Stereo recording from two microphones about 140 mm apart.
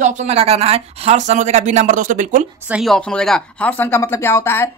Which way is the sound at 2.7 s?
Centre (ahead or behind).